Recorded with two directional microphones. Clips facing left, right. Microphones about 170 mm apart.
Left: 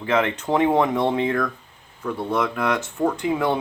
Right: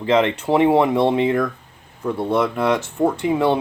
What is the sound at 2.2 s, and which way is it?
Speech, 30° right (ahead or behind).